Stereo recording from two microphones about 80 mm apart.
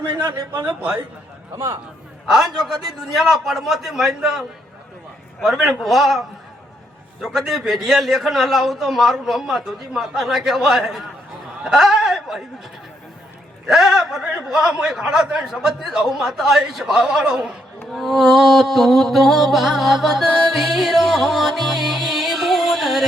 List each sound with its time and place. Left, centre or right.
0.1 s a man's voice: right
0.7 s a man's voice: centre
1.5 s a man's voice: right
3.2 s music: centre
13.7 s music: centre